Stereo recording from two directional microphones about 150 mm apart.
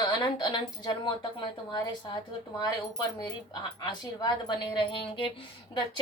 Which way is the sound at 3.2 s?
30° left (ahead or behind).